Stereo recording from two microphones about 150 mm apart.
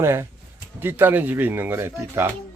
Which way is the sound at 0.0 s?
15° right (ahead or behind).